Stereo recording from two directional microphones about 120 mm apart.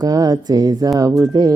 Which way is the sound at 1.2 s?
30° right (ahead or behind).